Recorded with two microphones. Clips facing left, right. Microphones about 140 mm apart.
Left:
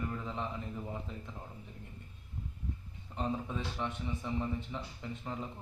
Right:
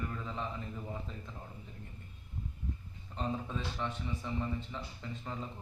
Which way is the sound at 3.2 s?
10° left (ahead or behind).